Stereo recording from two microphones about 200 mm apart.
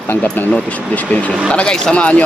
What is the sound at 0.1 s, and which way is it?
Speech, 10° left (ahead or behind).